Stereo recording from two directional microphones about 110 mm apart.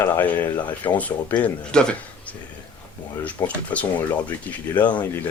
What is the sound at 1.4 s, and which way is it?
Speech, 10° left (ahead or behind).